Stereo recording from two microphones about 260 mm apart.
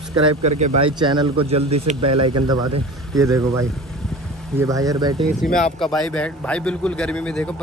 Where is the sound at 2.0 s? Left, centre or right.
Right.